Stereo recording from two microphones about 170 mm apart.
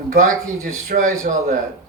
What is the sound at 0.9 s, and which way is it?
Speech, 55° right (ahead or behind).